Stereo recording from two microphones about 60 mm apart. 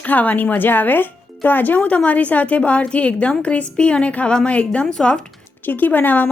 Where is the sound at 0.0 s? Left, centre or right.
Left.